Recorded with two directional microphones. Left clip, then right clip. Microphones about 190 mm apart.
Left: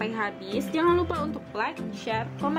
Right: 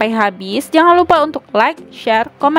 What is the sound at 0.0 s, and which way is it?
A woman's voice, 50° right (ahead or behind).